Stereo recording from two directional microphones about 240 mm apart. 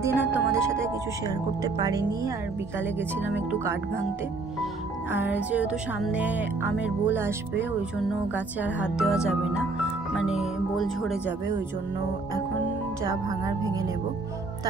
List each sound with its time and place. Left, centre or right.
0.0 s music: centre
5.1 s music: centre
8.5 s speech: centre
13.0 s music: centre